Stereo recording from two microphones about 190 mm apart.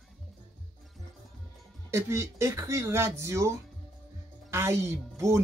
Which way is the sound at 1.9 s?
15° right (ahead or behind).